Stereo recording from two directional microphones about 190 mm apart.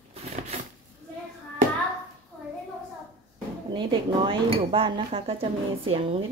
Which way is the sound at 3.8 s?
25° right (ahead or behind).